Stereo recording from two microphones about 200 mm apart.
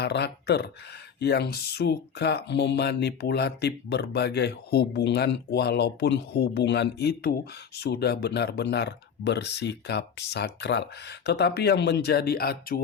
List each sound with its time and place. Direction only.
0.0 s speech: 55° left (ahead or behind)